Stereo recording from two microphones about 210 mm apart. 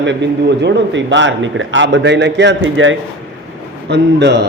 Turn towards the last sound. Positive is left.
turn(degrees=-55)  # may be behind; listen again after turning